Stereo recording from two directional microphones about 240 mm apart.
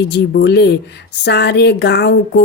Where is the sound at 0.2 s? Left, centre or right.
Left.